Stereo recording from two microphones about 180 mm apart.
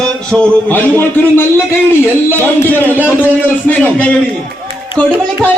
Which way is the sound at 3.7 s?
5° left (ahead or behind).